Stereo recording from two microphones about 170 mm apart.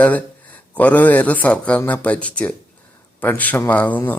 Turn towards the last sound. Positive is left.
turn(degrees=10)  # may be behind; listen again after turning